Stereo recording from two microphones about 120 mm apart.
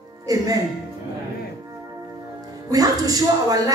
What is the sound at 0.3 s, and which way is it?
Speech, 30° right (ahead or behind).